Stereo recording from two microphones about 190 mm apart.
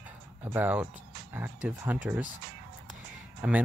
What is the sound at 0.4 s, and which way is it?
Speech, 10° right (ahead or behind).